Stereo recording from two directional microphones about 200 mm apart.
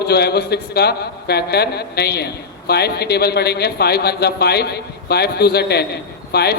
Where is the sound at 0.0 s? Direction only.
55° left (ahead or behind).